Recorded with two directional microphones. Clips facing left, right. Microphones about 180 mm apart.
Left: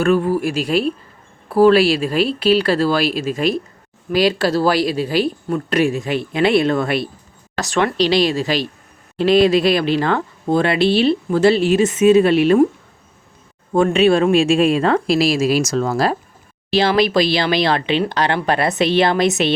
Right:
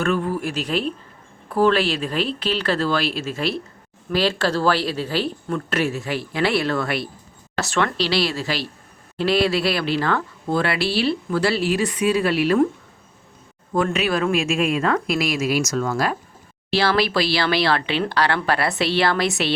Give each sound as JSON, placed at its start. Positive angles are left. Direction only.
{"t": 0.0, "sound": "speech", "side_deg": 10}
{"t": 13.7, "sound": "speech", "side_deg": 25}
{"t": 16.7, "sound": "speech", "side_deg": 20}